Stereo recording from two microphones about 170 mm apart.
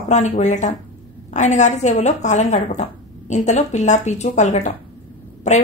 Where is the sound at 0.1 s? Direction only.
45° left (ahead or behind).